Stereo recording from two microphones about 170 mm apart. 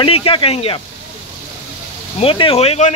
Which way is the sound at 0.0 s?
30° left (ahead or behind).